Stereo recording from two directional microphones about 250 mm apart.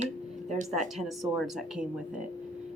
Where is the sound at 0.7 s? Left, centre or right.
Centre.